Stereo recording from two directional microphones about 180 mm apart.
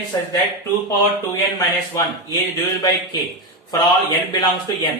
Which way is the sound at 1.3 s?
20° left (ahead or behind).